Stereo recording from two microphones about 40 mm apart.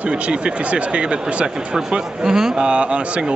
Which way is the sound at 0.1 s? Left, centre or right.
Right.